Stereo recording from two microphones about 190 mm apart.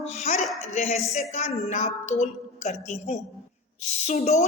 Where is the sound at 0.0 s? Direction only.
40° left (ahead or behind).